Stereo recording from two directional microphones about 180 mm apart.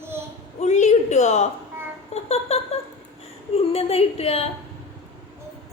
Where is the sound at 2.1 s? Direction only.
35° left (ahead or behind).